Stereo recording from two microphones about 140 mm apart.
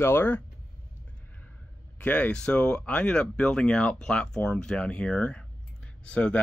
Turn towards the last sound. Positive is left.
turn(degrees=10)  # may be behind; listen again after turning